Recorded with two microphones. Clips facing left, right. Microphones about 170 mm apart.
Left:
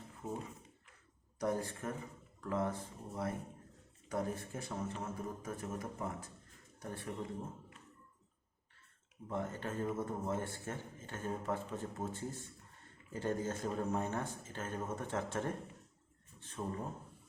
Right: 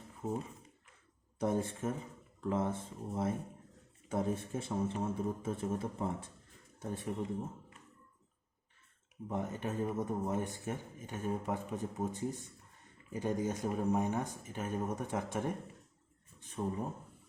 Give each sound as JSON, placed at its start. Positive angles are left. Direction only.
{"t": 1.4, "sound": "speech", "side_deg": -25}
{"t": 9.3, "sound": "a man's voice", "side_deg": -15}
{"t": 16.4, "sound": "a sound", "side_deg": -15}